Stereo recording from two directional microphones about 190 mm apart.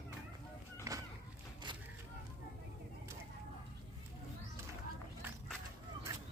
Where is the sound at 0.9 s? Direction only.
15° right (ahead or behind).